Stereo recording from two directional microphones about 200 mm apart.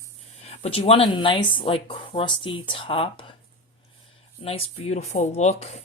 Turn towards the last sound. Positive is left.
turn(degrees=35)  # may be behind; listen again after turning